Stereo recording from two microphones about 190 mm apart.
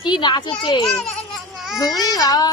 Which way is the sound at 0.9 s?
Centre (ahead or behind).